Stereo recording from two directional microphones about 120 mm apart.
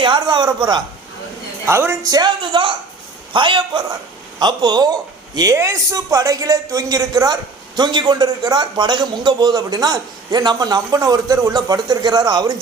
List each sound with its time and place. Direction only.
0.0 s a man's voice: 40° right (ahead or behind)
1.6 s a man's voice: 20° right (ahead or behind)